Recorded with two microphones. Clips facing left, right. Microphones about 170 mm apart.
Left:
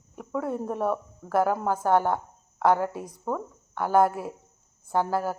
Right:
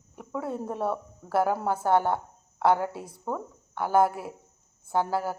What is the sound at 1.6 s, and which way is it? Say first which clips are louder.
Speech: left 1 dB; 25° right (ahead or behind).